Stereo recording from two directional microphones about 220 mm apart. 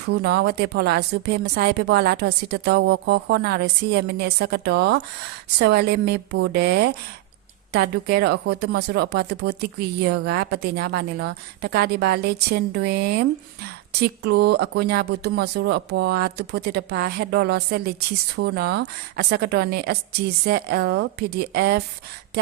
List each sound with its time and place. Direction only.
0.0 s speech: 50° right (ahead or behind)